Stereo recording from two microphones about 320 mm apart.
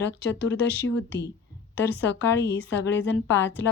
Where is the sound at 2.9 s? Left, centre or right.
Left.